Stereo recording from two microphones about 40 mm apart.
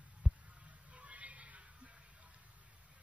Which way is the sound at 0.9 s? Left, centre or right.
Right.